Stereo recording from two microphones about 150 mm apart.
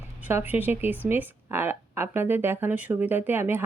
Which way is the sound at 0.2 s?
10° right (ahead or behind).